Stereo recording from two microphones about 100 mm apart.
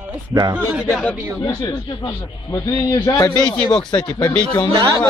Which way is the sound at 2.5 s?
35° left (ahead or behind).